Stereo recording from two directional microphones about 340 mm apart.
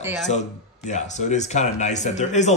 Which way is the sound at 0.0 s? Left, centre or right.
Centre.